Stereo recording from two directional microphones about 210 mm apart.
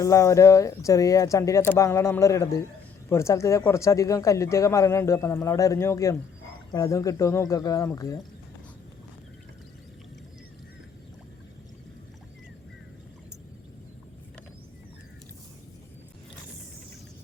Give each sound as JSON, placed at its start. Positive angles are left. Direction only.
{"t": 0.0, "sound": "a man's voice", "side_deg": 15}